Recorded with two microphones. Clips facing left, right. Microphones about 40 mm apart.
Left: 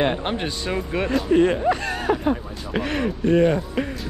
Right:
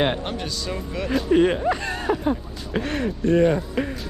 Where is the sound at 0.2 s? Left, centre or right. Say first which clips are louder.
Left 3 dB; left.